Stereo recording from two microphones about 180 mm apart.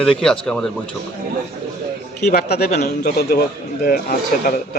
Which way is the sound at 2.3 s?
60° left (ahead or behind).